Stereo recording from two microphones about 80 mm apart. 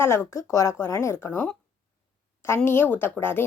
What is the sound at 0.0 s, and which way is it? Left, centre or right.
A woman's voice, left.